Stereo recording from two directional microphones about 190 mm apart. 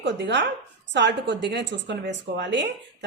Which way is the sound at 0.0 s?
70° right (ahead or behind).